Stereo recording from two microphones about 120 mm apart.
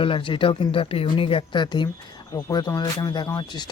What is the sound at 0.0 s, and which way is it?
Speech, 45° left (ahead or behind).